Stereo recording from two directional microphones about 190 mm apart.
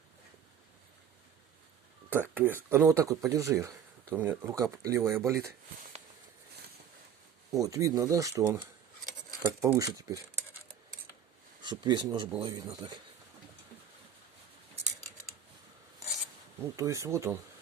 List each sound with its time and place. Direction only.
2.0 s speech: 10° right (ahead or behind)
7.5 s speech: 15° right (ahead or behind)
11.6 s speech: 20° right (ahead or behind)
16.7 s speech: 15° right (ahead or behind)